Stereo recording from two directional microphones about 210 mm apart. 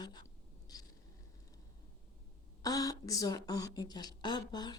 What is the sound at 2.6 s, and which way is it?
Speech, 15° left (ahead or behind).